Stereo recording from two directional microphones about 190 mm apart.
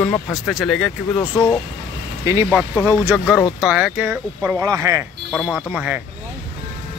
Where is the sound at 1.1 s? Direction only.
20° left (ahead or behind).